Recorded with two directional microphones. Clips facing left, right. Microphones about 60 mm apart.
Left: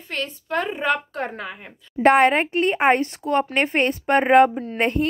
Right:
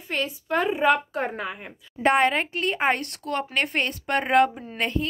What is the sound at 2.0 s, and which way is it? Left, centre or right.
A woman's voice, left.